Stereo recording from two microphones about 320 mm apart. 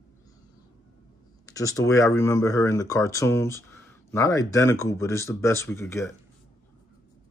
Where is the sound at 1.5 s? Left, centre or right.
Centre.